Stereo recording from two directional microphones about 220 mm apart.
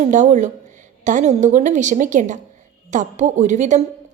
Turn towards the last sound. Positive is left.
turn(degrees=-35)  # may be behind; listen again after turning